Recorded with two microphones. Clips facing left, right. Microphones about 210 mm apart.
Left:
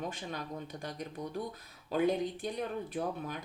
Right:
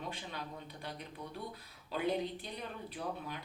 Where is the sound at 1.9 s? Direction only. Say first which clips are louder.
Left 5 dB; 50° left (ahead or behind).